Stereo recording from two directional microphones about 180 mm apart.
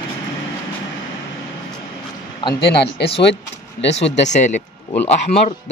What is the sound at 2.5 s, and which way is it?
Speech, 65° left (ahead or behind).